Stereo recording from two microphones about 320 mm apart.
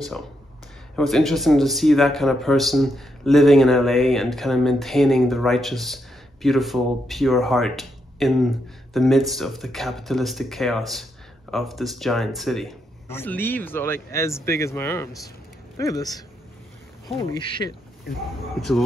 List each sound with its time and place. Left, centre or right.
0.9 s a man's voice: centre